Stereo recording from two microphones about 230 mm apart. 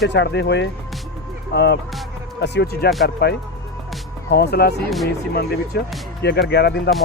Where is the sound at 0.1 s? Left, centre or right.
Left.